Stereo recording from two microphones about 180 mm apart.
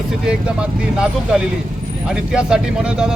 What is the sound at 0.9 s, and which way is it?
Speech, 5° right (ahead or behind).